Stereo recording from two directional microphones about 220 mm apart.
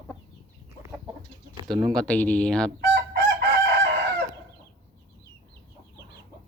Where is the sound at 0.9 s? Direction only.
20° right (ahead or behind).